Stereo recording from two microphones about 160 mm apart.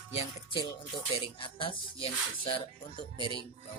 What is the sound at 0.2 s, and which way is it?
Music, 30° left (ahead or behind).